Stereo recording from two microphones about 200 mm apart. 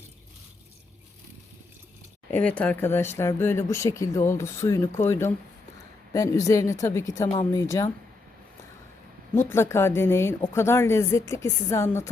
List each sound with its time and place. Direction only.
2.3 s speech: 5° left (ahead or behind)
9.5 s speech: 10° left (ahead or behind)